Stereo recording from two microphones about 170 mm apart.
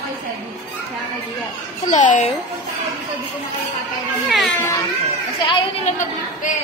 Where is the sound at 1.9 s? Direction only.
45° left (ahead or behind).